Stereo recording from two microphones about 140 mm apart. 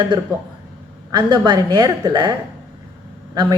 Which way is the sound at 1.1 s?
30° right (ahead or behind).